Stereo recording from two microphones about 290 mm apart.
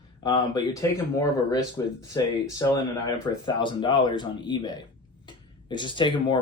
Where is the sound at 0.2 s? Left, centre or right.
Centre.